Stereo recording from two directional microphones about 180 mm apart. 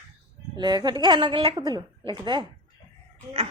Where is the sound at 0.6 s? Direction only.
25° right (ahead or behind).